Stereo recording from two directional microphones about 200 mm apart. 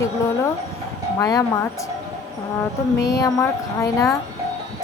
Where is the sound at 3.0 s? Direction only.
15° left (ahead or behind).